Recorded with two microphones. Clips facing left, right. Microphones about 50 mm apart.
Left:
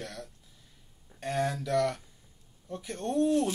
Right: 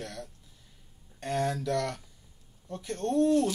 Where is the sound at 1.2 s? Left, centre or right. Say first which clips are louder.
Right 1 dB; centre.